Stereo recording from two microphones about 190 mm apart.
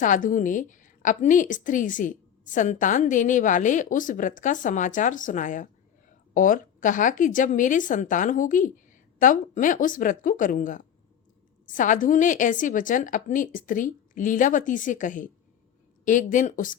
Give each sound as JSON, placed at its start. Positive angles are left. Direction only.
{"t": 0.0, "sound": "a woman's voice", "side_deg": 45}